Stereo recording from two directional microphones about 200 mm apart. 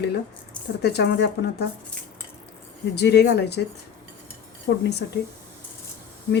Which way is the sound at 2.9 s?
55° left (ahead or behind).